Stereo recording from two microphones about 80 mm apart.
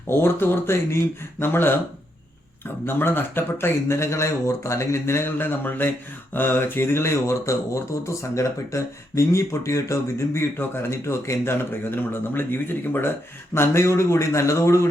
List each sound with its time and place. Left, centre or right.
0.1 s speech: left